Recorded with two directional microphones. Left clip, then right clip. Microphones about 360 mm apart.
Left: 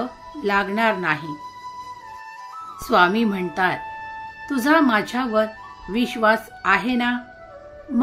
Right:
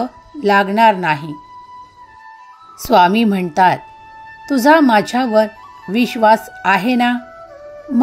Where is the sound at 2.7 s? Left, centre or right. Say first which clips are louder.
Right 6 dB; right.